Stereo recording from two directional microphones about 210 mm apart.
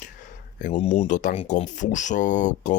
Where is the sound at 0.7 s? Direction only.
25° left (ahead or behind).